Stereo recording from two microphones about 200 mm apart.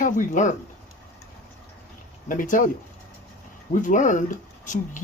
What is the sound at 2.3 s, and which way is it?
Speech, 40° left (ahead or behind).